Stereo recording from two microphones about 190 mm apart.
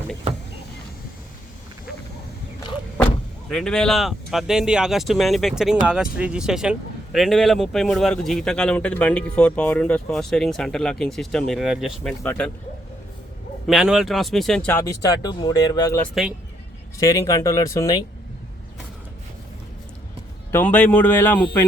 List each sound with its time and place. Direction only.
3.5 s speech: 5° left (ahead or behind)
12.2 s speech: 10° left (ahead or behind)
13.7 s speech: centre (ahead or behind); by 16.0 s 20° left (ahead or behind)
16.2 s speech: centre (ahead or behind)
17.0 s speech: 15° left (ahead or behind)
20.5 s speech: 10° left (ahead or behind)